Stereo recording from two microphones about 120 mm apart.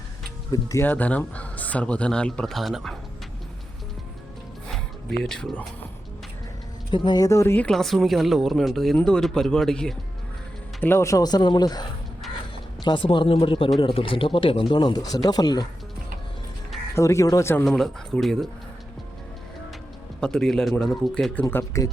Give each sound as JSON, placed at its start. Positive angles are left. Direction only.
{"t": 0.5, "sound": "speech", "side_deg": 25}
{"t": 0.9, "sound": "speech", "side_deg": 15}
{"t": 4.7, "sound": "a sound", "side_deg": 5}
{"t": 6.9, "sound": "speech", "side_deg": 40}
{"t": 7.3, "sound": "speech", "side_deg": 25}
{"t": 7.7, "sound": "speech", "side_deg": 0}
{"t": 10.8, "sound": "speech", "side_deg": 20}
{"t": 16.9, "sound": "speech", "side_deg": 25}
{"t": 17.7, "sound": "speech", "side_deg": 0}
{"t": 20.2, "sound": "speech", "side_deg": 5}
{"t": 21.5, "sound": "speech", "side_deg": 25}